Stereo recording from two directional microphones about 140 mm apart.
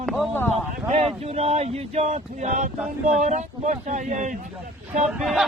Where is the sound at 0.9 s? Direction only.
50° right (ahead or behind).